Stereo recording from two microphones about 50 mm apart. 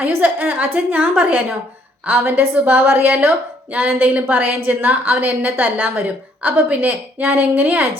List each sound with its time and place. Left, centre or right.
0.2 s a woman's voice: right